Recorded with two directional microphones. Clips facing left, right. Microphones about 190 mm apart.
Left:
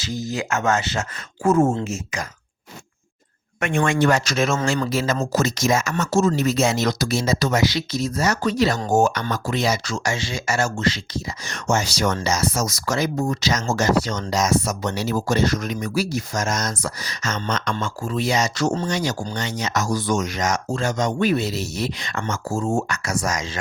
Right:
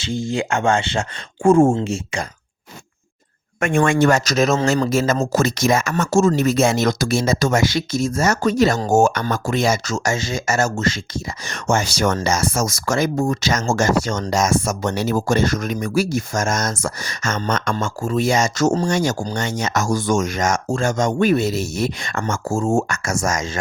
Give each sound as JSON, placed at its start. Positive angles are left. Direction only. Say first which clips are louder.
{"t": 0.0, "sound": "speech", "louder": "right 4 dB", "side_deg": -25}
{"t": 3.6, "sound": "speech", "louder": "right 4 dB", "side_deg": -50}